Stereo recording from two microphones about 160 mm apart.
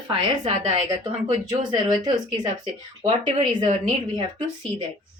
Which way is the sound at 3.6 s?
50° right (ahead or behind).